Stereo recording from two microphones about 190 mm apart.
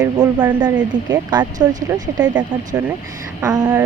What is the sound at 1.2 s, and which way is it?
Speech, 20° right (ahead or behind).